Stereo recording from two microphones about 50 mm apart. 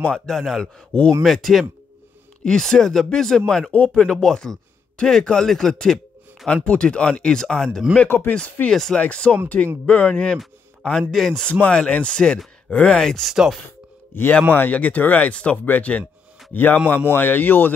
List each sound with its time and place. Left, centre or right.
0.0 s speech: centre
1.2 s speech: centre
6.4 s speech: left
8.3 s speech: left
8.6 s speech: centre
8.9 s speech: left
10.3 s speech: centre
11.6 s speech: left
12.9 s speech: centre
13.3 s speech: centre
14.1 s speech: left
14.8 s speech: left